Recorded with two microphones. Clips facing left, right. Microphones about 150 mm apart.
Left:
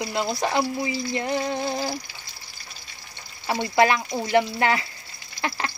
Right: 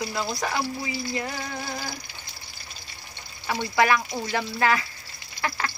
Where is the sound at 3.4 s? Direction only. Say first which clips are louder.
Left 2 dB; 25° left (ahead or behind).